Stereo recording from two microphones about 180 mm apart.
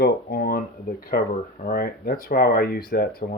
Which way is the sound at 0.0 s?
55° left (ahead or behind).